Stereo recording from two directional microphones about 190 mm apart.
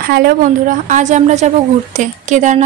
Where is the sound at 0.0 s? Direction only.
55° right (ahead or behind).